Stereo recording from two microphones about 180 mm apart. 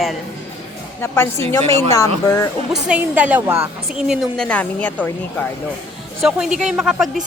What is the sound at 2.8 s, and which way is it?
A woman's voice, 10° right (ahead or behind).